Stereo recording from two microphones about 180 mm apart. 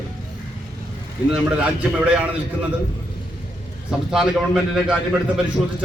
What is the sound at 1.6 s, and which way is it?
Speech, 5° right (ahead or behind).